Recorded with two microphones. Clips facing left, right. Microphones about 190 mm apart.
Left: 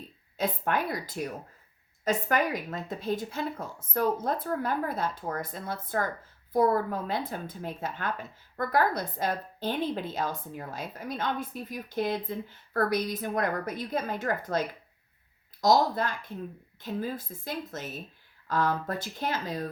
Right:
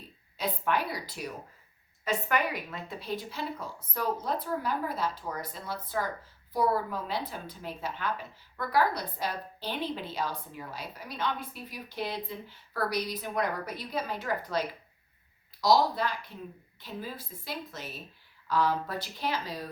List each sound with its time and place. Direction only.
0.3 s a woman's voice: 50° left (ahead or behind)
15.6 s a woman's voice: 45° left (ahead or behind)